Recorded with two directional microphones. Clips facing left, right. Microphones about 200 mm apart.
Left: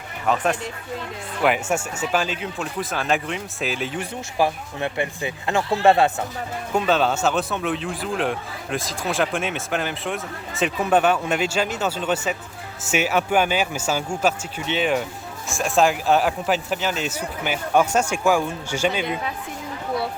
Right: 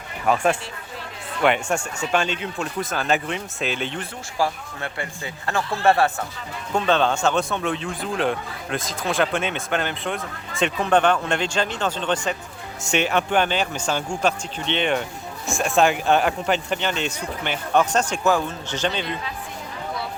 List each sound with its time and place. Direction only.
0.3 s speech: 10° right (ahead or behind)
1.4 s a man's voice: 5° left (ahead or behind)
4.4 s speech: 20° left (ahead or behind)
6.7 s a man's voice: 5° left (ahead or behind)